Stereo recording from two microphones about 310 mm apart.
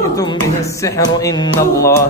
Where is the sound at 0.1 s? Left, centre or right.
Centre.